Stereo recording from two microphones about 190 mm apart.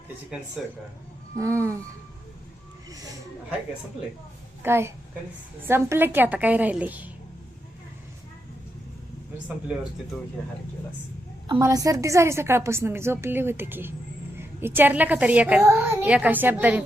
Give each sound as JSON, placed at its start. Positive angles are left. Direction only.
{"t": 0.6, "sound": "a man's voice", "side_deg": -5}
{"t": 1.4, "sound": "a woman's voice", "side_deg": -15}
{"t": 4.6, "sound": "a woman's voice", "side_deg": -15}
{"t": 11.4, "sound": "a woman's voice", "side_deg": -20}